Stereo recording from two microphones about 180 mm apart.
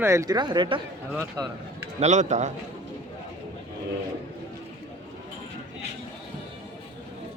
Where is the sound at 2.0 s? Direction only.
40° right (ahead or behind).